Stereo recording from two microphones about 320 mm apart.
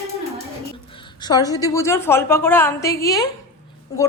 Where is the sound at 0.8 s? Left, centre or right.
Centre.